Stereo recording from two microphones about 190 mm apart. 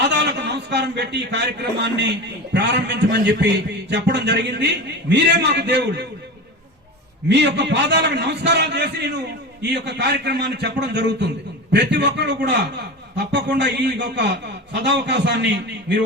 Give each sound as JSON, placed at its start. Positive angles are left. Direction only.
{"t": 0.0, "sound": "a man's voice", "side_deg": -65}
{"t": 7.3, "sound": "a man's voice", "side_deg": -65}